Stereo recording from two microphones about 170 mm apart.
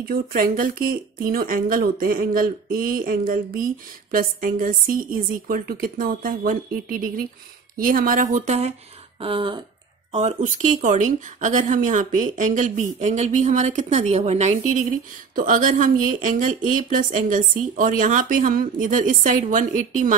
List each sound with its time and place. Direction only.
0.1 s speech: 60° right (ahead or behind); by 8.7 s 40° right (ahead or behind)
9.2 s speech: 30° right (ahead or behind)
10.1 s speech: 45° right (ahead or behind)